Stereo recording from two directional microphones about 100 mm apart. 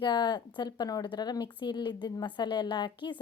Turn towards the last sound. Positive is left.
turn(degrees=50)  # may be behind; listen again after turning